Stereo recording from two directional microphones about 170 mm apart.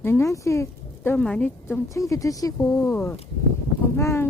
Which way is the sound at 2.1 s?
20° left (ahead or behind).